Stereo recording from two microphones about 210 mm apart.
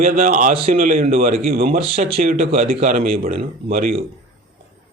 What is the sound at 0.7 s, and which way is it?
Speech, 40° right (ahead or behind).